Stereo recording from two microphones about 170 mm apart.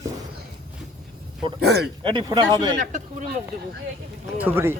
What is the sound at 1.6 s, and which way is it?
Speech, 75° right (ahead or behind).